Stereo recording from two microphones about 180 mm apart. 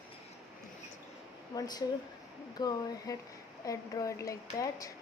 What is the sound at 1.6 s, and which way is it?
A woman's voice, 20° left (ahead or behind).